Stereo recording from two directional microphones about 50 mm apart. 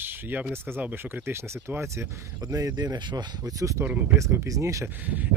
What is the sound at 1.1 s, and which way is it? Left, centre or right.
Speech, right.